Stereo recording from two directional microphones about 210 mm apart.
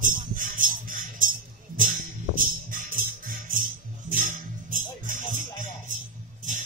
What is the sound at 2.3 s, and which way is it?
Music, 40° right (ahead or behind).